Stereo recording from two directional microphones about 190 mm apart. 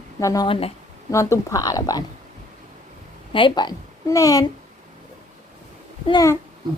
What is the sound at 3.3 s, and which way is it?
A woman's voice, 25° left (ahead or behind).